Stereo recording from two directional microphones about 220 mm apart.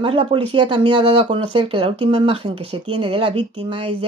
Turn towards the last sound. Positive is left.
turn(degrees=-25)  # may be behind; listen again after turning